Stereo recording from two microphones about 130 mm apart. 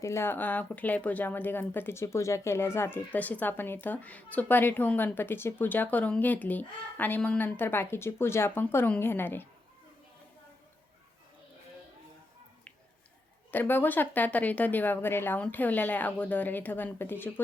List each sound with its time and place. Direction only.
0.0 s a woman's voice: 20° left (ahead or behind)
13.5 s a woman's voice: 15° left (ahead or behind)